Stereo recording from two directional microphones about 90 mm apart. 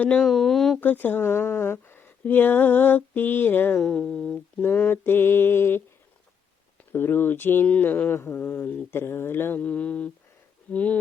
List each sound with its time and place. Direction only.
0.2 s speech: 5° left (ahead or behind)
0.8 s mantra: 20° left (ahead or behind)
3.8 s speech: 10° left (ahead or behind)
4.6 s mantra: 20° left (ahead or behind)
6.9 s mantra: 25° left (ahead or behind)
10.7 s speech: 15° left (ahead or behind)